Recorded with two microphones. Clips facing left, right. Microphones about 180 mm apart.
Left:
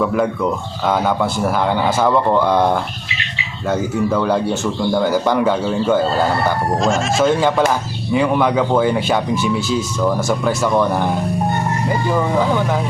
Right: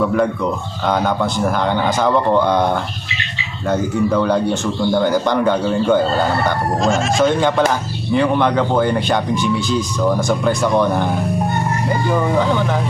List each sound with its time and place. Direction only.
0.9 s speech: 5° left (ahead or behind)
3.7 s speech: 5° left (ahead or behind)
12.4 s speech: 5° left (ahead or behind)